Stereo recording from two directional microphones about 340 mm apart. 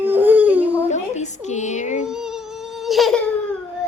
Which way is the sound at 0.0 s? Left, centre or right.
Centre.